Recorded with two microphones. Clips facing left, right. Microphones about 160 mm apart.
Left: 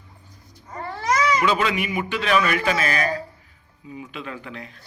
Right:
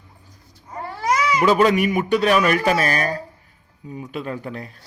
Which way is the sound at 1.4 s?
40° right (ahead or behind).